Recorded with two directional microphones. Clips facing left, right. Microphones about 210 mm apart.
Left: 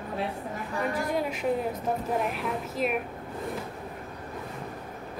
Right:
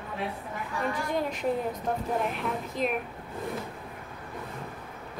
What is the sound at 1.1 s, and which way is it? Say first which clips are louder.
A woman's voice: right 1 dB; 5° left (ahead or behind).